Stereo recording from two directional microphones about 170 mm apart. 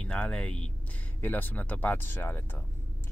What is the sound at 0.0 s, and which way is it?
Speech, 5° left (ahead or behind).